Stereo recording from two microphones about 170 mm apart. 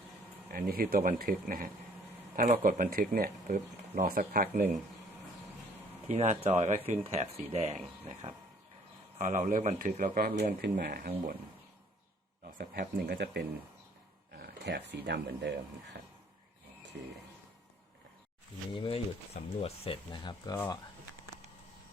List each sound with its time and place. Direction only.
0.5 s speech: 60° right (ahead or behind)
6.1 s speech: 40° right (ahead or behind)
9.1 s speech: 50° right (ahead or behind); by 11.1 s 65° right (ahead or behind)
12.8 s speech: 70° right (ahead or behind); by 16.0 s 85° right
18.7 s speech: 30° left (ahead or behind)